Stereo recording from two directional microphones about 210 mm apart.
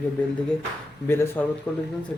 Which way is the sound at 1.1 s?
10° left (ahead or behind).